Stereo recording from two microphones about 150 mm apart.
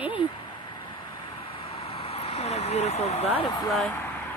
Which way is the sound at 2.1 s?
40° left (ahead or behind).